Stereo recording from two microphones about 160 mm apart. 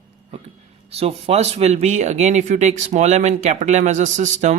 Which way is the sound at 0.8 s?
40° right (ahead or behind).